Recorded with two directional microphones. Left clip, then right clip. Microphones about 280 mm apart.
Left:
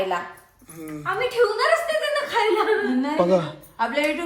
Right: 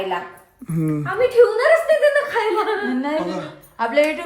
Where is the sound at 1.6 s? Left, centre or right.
Left.